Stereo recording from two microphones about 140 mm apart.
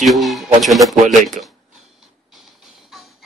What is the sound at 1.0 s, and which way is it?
Speech, 60° right (ahead or behind).